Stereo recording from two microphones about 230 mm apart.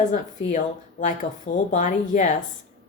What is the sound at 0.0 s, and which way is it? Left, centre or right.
Speech, left.